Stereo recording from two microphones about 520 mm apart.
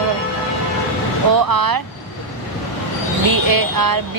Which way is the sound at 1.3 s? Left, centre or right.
Right.